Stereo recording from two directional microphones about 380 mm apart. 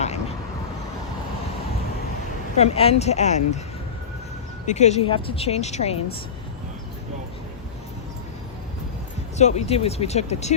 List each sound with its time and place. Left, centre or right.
0.0 s vehicle: centre
2.6 s speech: centre
4.6 s speech: centre
9.4 s speech: centre